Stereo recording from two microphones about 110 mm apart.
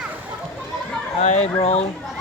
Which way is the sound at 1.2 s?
90° left.